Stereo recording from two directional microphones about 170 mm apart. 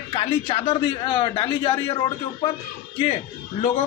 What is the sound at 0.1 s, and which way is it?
A man's voice, 35° left (ahead or behind).